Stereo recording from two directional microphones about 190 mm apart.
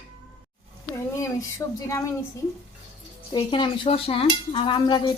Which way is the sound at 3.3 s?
25° left (ahead or behind).